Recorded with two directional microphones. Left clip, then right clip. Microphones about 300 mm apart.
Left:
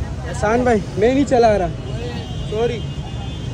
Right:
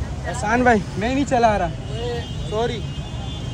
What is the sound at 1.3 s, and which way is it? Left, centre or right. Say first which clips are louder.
Speech: left 1 dB; left.